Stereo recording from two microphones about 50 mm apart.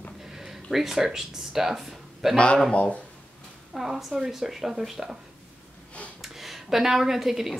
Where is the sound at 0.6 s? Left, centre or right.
Centre.